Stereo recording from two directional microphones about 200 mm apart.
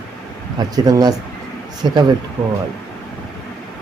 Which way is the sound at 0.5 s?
20° right (ahead or behind).